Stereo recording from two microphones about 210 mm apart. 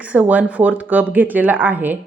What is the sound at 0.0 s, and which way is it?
A woman's voice, 5° right (ahead or behind).